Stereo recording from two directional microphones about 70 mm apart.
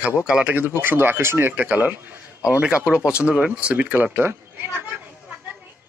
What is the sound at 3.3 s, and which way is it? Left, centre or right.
Speech, centre.